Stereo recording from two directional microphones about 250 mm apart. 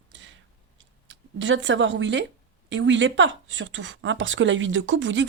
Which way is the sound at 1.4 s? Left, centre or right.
Right.